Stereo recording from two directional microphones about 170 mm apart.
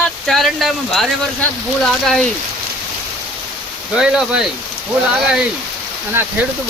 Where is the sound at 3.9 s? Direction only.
5° right (ahead or behind).